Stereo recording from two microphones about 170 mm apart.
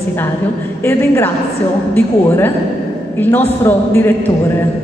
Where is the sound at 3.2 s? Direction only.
10° left (ahead or behind).